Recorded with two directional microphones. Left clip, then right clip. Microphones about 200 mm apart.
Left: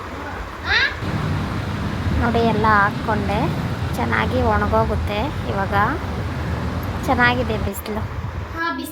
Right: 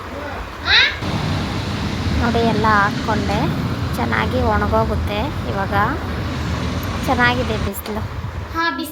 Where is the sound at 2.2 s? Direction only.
Centre (ahead or behind).